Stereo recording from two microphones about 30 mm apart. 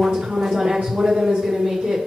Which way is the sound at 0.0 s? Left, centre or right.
Centre.